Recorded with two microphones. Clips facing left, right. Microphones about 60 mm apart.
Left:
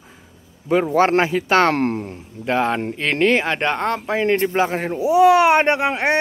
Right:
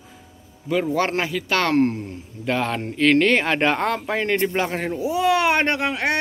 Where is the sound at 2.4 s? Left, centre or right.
Left.